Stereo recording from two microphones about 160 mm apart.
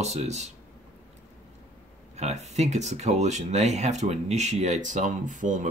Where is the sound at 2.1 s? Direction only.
45° right (ahead or behind).